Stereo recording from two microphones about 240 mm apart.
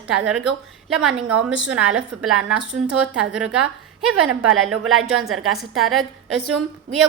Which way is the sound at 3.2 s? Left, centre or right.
Centre.